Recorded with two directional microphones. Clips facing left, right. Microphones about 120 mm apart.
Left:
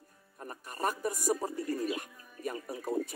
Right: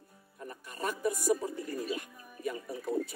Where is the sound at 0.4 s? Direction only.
45° left (ahead or behind).